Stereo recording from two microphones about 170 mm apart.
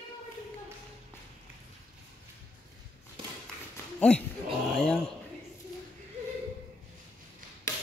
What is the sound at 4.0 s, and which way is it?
Speech, 5° left (ahead or behind).